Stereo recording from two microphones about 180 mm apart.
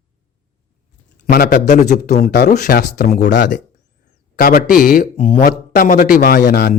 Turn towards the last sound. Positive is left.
turn(degrees=60)  # may be behind; listen again after turning